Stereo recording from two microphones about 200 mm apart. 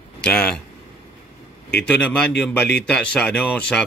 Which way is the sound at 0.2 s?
5° left (ahead or behind).